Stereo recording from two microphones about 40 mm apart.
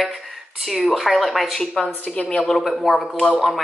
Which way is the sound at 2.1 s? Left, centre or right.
Centre.